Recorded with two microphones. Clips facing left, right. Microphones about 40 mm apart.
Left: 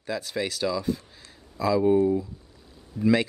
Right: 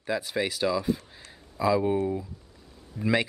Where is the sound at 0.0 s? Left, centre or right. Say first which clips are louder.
Right 1 dB; centre.